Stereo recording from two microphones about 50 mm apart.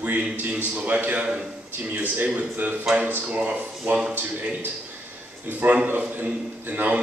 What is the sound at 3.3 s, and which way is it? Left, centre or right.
A man's voice, right.